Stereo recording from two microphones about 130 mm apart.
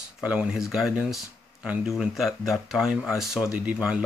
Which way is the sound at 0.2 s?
10° right (ahead or behind).